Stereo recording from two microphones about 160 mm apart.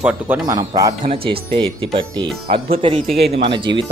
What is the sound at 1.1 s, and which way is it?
Speech, 35° right (ahead or behind).